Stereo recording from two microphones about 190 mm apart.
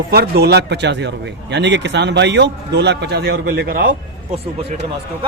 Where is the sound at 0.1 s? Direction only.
55° right (ahead or behind).